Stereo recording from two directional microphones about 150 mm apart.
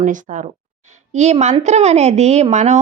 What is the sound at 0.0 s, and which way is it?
A woman's voice, 55° right (ahead or behind).